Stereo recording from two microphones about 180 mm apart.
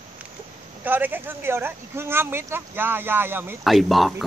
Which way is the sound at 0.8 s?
10° right (ahead or behind).